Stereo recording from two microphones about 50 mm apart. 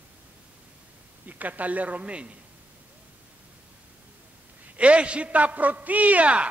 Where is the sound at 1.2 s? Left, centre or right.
Right.